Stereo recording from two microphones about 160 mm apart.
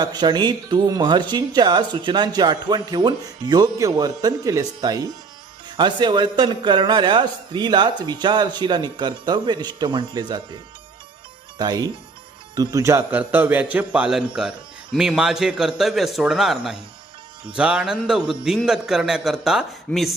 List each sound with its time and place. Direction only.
0.0 s speech: 25° right (ahead or behind)
11.5 s a man's voice: 25° right (ahead or behind); by 20.1 s centre (ahead or behind)